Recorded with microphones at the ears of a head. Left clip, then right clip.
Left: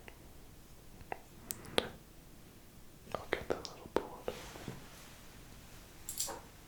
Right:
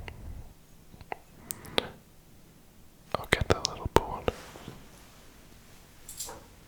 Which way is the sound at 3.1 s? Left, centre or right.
Right.